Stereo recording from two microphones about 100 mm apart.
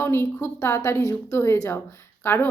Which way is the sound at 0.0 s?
25° left (ahead or behind).